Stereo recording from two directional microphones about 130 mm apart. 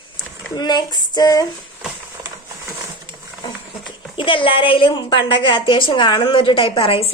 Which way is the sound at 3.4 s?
40° left (ahead or behind).